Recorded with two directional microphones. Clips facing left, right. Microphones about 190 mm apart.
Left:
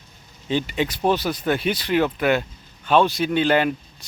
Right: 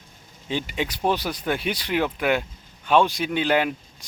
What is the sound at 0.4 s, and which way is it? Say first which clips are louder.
Speech: left 4 dB; 10° right (ahead or behind).